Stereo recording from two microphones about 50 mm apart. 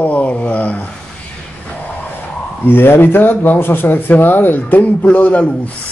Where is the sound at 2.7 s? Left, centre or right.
Left.